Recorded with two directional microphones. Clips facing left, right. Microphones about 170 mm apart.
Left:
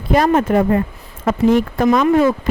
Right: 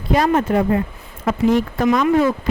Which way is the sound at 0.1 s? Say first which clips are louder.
Left 2 dB; 50° left (ahead or behind).